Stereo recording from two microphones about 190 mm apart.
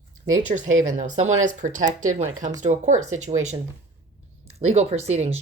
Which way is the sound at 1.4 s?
40° right (ahead or behind).